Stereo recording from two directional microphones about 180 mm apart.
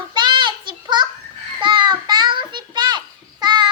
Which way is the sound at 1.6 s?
25° right (ahead or behind).